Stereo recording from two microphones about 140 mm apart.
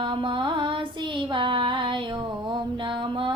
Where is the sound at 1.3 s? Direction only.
35° right (ahead or behind).